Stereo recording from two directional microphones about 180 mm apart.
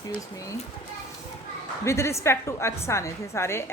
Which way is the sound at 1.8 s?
15° left (ahead or behind).